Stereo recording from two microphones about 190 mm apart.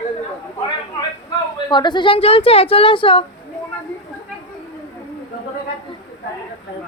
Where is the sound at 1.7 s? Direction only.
25° left (ahead or behind).